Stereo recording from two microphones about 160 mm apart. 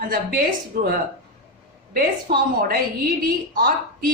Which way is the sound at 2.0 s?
70° right (ahead or behind).